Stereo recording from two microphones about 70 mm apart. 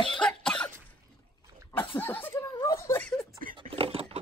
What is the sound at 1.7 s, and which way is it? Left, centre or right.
Laughter, left.